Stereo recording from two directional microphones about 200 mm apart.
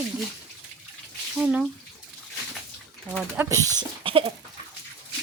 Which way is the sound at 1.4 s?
5° right (ahead or behind).